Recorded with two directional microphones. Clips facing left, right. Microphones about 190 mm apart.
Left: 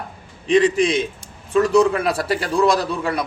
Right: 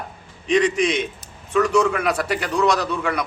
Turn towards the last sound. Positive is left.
turn(degrees=30)  # may be behind; listen again after turning